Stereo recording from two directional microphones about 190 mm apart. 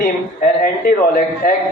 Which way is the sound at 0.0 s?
50° left (ahead or behind).